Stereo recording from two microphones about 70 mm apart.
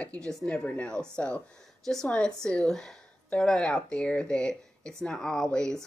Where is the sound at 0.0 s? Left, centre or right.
Centre.